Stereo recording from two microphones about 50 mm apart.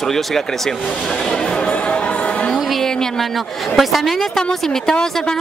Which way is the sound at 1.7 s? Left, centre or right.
Left.